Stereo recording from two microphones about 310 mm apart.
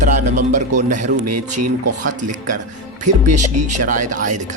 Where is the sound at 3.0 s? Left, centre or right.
Right.